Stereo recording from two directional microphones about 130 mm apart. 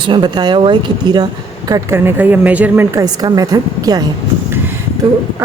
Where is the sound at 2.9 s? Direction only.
25° right (ahead or behind).